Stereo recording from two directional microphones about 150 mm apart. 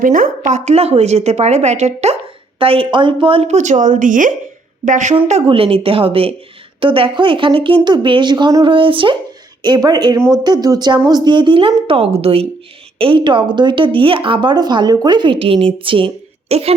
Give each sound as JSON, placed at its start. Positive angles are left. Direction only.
{"t": 0.0, "sound": "a woman's voice", "side_deg": -65}
{"t": 0.5, "sound": "speech", "side_deg": -45}
{"t": 2.6, "sound": "speech", "side_deg": -35}
{"t": 5.1, "sound": "speech", "side_deg": -35}